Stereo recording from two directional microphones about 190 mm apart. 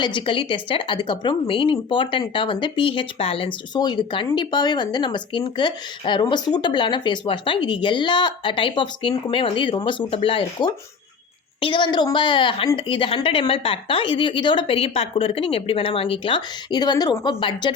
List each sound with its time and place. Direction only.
0.0 s speech: 25° left (ahead or behind)